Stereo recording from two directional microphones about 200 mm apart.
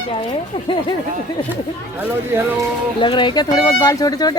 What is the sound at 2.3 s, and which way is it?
Speech, 10° right (ahead or behind).